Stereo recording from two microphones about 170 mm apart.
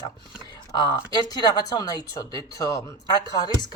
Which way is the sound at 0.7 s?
25° left (ahead or behind).